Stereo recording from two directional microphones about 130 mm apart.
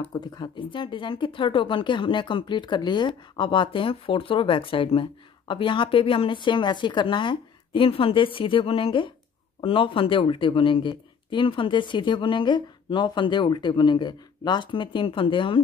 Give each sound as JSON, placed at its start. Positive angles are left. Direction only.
{"t": 0.1, "sound": "speech", "side_deg": 30}